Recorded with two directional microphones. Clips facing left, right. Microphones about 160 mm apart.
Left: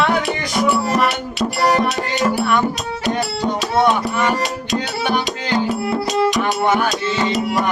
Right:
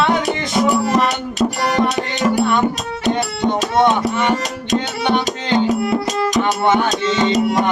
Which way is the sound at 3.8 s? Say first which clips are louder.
Right 1 dB; 25° right (ahead or behind).